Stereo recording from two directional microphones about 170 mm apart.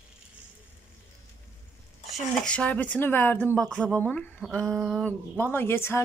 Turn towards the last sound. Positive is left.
turn(degrees=15)  # may be behind; listen again after turning